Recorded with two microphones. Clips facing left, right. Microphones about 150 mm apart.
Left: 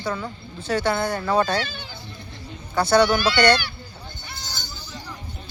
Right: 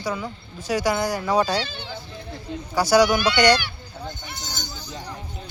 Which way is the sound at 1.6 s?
30° right (ahead or behind).